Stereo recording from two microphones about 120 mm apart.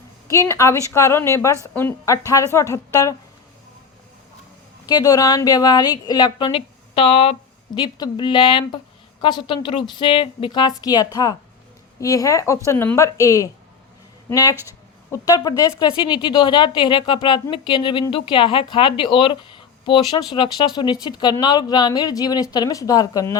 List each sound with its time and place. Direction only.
0.3 s a woman's voice: 25° left (ahead or behind)
4.9 s a woman's voice: 30° left (ahead or behind); by 7.3 s 50° left (ahead or behind)
7.8 s a woman's voice: 35° left (ahead or behind)